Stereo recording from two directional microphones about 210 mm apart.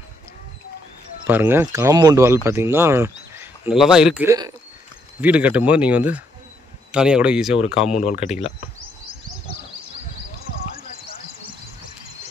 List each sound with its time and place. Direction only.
1.2 s speech: 10° right (ahead or behind)
8.0 s speech: 35° left (ahead or behind)